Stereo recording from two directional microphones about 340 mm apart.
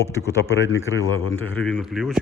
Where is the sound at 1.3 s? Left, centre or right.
Centre.